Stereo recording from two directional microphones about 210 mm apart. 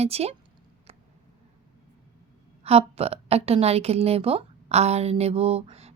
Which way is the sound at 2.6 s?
30° right (ahead or behind).